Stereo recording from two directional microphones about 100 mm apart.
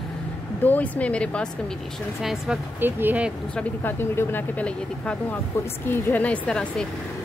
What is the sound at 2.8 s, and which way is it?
Speech, 20° right (ahead or behind).